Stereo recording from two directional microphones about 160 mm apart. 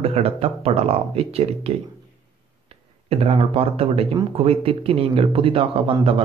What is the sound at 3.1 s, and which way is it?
A man's voice, 40° right (ahead or behind).